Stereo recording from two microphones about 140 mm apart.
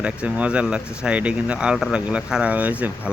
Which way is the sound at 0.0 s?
10° right (ahead or behind).